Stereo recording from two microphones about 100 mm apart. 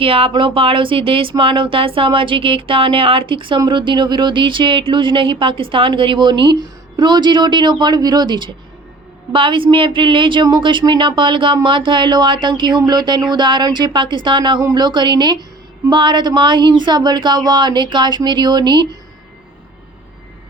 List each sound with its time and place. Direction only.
0.0 s a woman's voice: 65° right (ahead or behind)
14.6 s a woman's voice: 40° right (ahead or behind)